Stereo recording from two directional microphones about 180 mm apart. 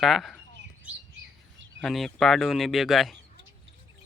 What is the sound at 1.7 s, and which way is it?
Speech, centre (ahead or behind).